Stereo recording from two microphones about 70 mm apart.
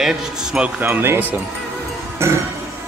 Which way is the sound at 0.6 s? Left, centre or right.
Right.